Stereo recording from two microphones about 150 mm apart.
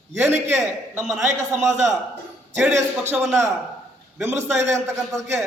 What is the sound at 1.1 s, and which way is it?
Speech, 20° right (ahead or behind).